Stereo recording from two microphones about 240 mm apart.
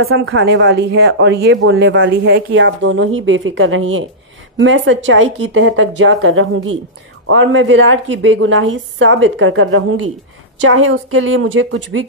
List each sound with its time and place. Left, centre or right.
0.0 s a woman's voice: right